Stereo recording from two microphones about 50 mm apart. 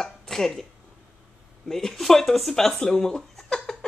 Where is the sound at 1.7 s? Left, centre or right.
Centre.